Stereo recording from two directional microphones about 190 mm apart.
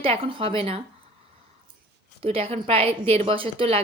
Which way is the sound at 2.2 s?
30° right (ahead or behind).